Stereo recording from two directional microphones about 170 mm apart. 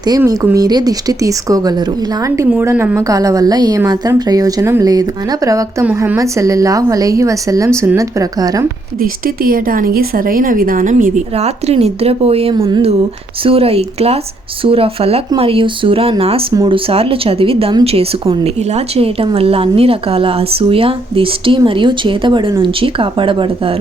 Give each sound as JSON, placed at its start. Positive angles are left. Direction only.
{"t": 0.2, "sound": "a woman's voice", "side_deg": -15}
{"t": 9.0, "sound": "speech", "side_deg": -55}
{"t": 11.3, "sound": "speech", "side_deg": -40}